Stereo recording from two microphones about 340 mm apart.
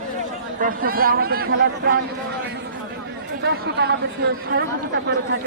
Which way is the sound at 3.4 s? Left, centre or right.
Right.